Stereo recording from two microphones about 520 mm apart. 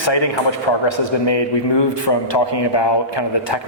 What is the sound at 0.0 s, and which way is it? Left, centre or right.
A man's voice, left.